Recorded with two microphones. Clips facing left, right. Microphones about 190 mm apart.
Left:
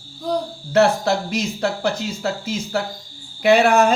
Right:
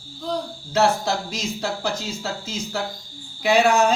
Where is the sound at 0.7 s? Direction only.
60° left (ahead or behind).